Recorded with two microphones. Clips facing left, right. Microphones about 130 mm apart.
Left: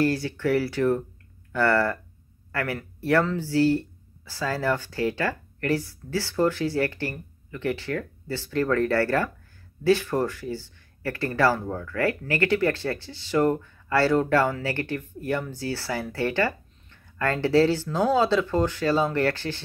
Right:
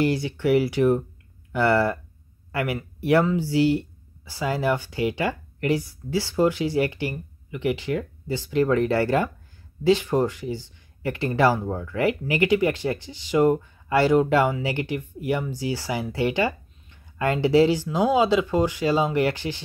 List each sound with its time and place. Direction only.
0.0 s speech: 15° right (ahead or behind)